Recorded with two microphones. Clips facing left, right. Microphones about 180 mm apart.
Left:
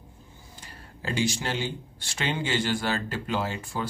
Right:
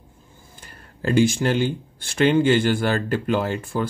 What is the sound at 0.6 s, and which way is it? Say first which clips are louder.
Speech: right 8 dB; 55° right (ahead or behind).